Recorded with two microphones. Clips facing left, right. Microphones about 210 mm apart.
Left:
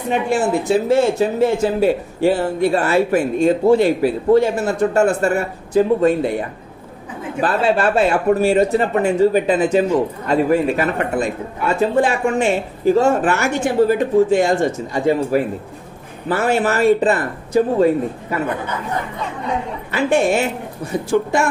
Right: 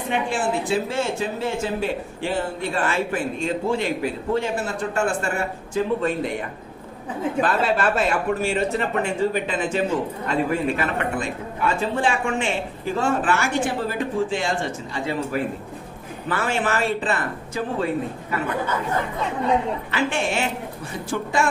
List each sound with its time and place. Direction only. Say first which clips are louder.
0.3 s speech: left 9 dB; 40° left (ahead or behind)
19.9 s speech: left 10 dB; 40° left (ahead or behind)